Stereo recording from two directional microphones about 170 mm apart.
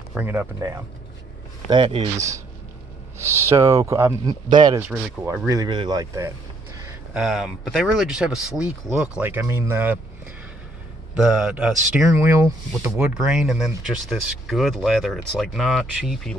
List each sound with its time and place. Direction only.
0.1 s speech: 10° right (ahead or behind)
1.7 s speech: 30° right (ahead or behind)
2.1 s speech: 20° right (ahead or behind)
4.8 s speech: 10° right (ahead or behind)
5.5 s speech: 25° right (ahead or behind)
7.2 s speech: centre (ahead or behind)
11.1 s speech: 5° right (ahead or behind)
12.9 s speech: 5° right (ahead or behind)